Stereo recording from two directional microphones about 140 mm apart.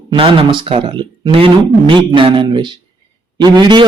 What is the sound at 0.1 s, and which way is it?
Speech, 35° right (ahead or behind).